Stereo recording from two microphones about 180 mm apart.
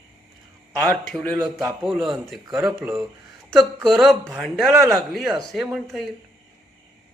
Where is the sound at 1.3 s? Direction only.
20° right (ahead or behind).